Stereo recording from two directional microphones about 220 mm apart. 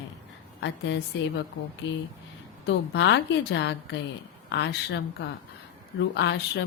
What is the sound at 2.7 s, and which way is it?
A woman's voice, 55° left (ahead or behind).